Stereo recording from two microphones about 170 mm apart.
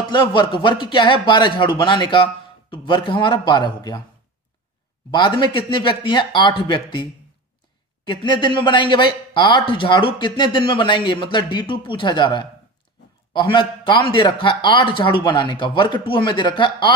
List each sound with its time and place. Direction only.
0.1 s speech: 30° left (ahead or behind)
5.1 s speech: 30° left (ahead or behind)